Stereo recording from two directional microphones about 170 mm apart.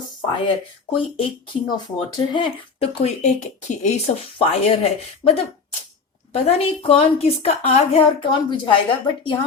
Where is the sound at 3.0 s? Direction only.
45° left (ahead or behind).